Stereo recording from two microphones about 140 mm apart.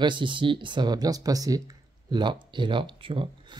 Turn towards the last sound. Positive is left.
turn(degrees=-40)  # may be behind; listen again after turning